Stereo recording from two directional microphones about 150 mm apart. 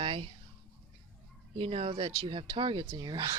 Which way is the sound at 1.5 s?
40° right (ahead or behind).